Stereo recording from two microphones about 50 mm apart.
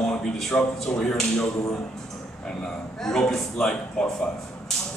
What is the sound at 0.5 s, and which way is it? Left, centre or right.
Speech, left.